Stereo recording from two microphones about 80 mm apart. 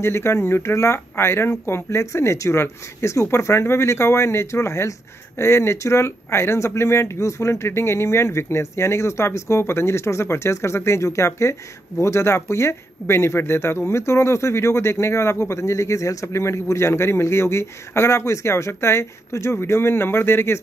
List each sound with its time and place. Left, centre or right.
0.0 s speech: left